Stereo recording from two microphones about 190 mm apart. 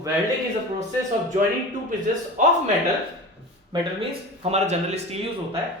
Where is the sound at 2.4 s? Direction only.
40° right (ahead or behind).